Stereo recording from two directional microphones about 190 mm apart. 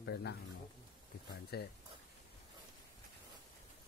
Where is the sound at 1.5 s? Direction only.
55° left (ahead or behind).